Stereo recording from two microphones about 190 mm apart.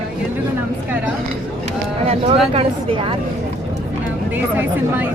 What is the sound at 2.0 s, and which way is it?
Speech, 30° right (ahead or behind).